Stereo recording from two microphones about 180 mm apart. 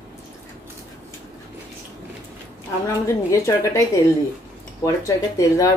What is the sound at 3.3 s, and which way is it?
A woman's voice, 15° left (ahead or behind).